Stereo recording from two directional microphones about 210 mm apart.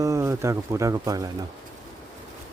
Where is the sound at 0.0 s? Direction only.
15° right (ahead or behind).